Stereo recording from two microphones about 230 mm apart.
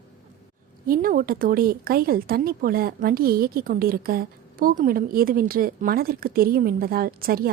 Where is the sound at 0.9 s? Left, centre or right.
Right.